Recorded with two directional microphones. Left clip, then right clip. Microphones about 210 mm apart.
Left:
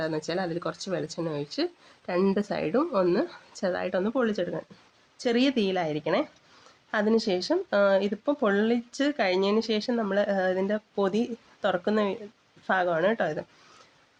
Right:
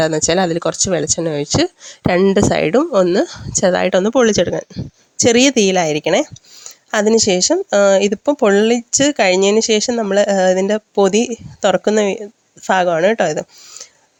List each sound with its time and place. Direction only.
0.0 s speech: 45° right (ahead or behind)